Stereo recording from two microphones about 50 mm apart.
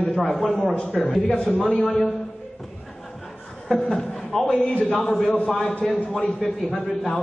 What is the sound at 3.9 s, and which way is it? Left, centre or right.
Speech, centre.